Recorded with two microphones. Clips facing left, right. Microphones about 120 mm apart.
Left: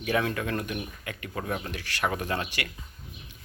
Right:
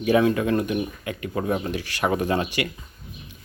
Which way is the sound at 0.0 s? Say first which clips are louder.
Right 8 dB; 15° right (ahead or behind).